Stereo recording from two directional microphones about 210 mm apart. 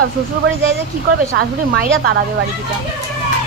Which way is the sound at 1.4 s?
50° right (ahead or behind).